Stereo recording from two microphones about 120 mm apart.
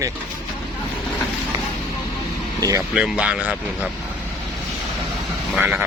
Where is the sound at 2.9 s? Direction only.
10° right (ahead or behind).